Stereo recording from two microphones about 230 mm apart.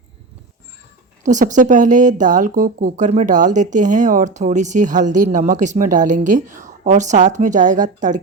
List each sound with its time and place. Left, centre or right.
1.2 s speech: right